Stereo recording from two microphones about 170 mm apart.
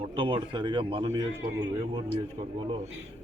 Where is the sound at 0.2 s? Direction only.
30° right (ahead or behind).